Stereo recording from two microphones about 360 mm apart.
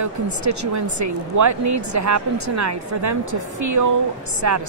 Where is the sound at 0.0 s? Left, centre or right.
Right.